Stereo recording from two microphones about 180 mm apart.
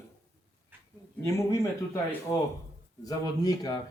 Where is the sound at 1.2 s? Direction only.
15° left (ahead or behind).